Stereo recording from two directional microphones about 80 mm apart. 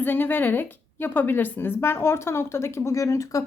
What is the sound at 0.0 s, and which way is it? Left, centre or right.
A woman's voice, left.